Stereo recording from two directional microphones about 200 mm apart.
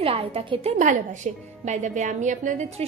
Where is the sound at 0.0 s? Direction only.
30° right (ahead or behind).